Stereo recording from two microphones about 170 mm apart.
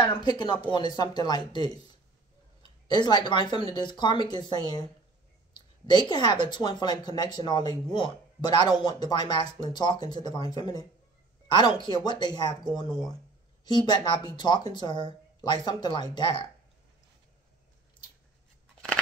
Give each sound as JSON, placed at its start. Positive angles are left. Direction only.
{"t": 0.2, "sound": "speech", "side_deg": 25}